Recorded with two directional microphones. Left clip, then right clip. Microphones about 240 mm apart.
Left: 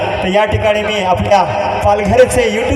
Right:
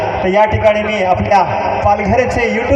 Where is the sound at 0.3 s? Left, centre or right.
Left.